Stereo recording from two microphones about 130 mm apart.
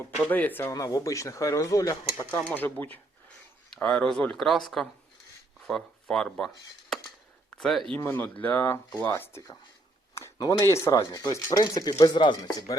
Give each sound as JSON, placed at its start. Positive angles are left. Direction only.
{"t": 0.0, "sound": "speech", "side_deg": 15}
{"t": 0.7, "sound": "speech", "side_deg": 25}
{"t": 2.1, "sound": "speech", "side_deg": 15}
{"t": 7.5, "sound": "speech", "side_deg": 0}
{"t": 7.9, "sound": "speech", "side_deg": 15}
{"t": 10.2, "sound": "a sound", "side_deg": 25}
{"t": 10.7, "sound": "speech", "side_deg": 20}